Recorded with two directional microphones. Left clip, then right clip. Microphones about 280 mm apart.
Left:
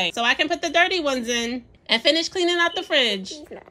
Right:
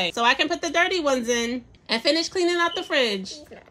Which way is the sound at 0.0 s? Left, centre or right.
Centre.